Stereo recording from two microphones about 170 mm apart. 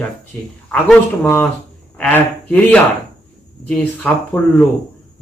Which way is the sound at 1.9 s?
5° left (ahead or behind).